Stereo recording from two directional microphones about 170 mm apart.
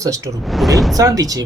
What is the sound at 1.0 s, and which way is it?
Speech, 20° right (ahead or behind).